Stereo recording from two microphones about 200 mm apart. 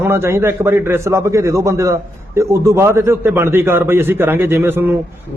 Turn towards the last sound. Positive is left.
turn(degrees=-10)  # may be behind; listen again after turning